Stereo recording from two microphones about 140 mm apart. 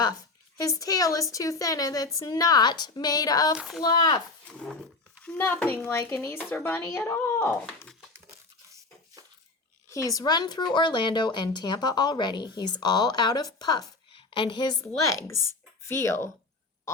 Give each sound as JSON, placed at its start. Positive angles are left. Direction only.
{"t": 0.6, "sound": "a woman's voice", "side_deg": 25}
{"t": 3.6, "sound": "speech", "side_deg": -5}
{"t": 3.8, "sound": "a woman's voice", "side_deg": 30}
{"t": 5.2, "sound": "speech", "side_deg": 10}
{"t": 9.9, "sound": "a woman's voice", "side_deg": 25}
{"t": 14.1, "sound": "a sound", "side_deg": 40}
{"t": 15.0, "sound": "speech", "side_deg": 20}